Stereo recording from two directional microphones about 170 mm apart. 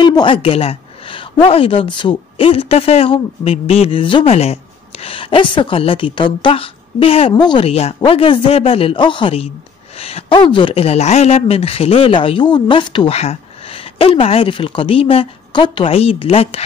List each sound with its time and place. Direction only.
0.0 s a woman's voice: 30° left (ahead or behind)